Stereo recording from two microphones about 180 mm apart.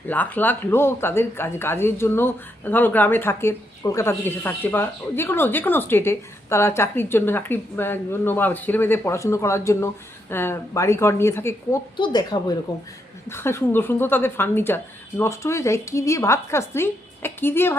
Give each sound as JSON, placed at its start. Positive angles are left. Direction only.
{"t": 0.1, "sound": "speech", "side_deg": 10}
{"t": 11.9, "sound": "a woman's voice", "side_deg": 25}